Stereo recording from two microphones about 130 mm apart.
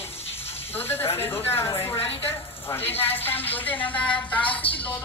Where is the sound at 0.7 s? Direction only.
15° left (ahead or behind).